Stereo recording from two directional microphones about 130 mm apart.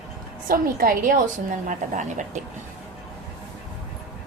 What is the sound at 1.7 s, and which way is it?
Speech, 75° right (ahead or behind).